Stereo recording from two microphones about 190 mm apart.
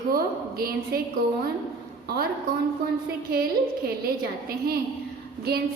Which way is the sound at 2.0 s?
50° right (ahead or behind).